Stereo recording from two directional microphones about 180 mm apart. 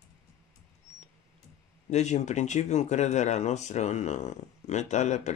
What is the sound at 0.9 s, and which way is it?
Mouse, 40° left (ahead or behind).